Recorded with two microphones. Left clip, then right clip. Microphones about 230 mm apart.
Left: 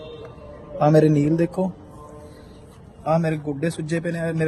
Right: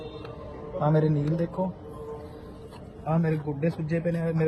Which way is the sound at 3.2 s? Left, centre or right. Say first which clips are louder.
Left 4 dB; left.